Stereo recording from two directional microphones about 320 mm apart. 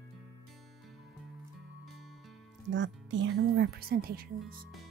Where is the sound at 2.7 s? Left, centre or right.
Right.